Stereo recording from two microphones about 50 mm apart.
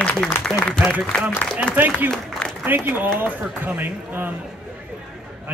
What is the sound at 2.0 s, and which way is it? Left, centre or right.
Speech, right.